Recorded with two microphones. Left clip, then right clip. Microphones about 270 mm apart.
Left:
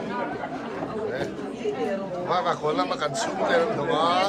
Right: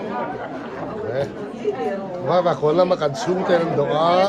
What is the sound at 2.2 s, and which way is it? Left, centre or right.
Speech, right.